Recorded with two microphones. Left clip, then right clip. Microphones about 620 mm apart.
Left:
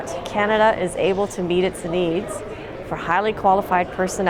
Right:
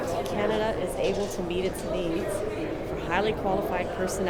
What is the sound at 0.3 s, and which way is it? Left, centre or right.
A woman's voice, left.